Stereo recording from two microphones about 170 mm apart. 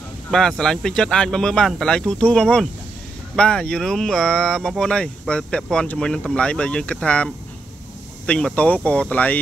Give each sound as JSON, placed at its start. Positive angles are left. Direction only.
{"t": 0.3, "sound": "speech", "side_deg": 5}